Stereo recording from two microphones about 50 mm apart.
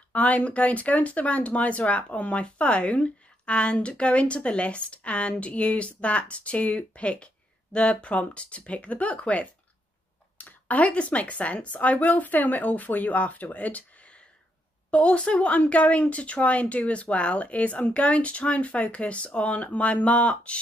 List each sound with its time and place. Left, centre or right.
0.1 s speech: left